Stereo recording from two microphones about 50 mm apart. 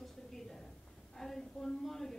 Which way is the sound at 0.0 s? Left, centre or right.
Centre.